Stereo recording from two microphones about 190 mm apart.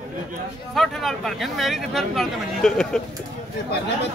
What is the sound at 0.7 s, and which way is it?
Speech, centre (ahead or behind).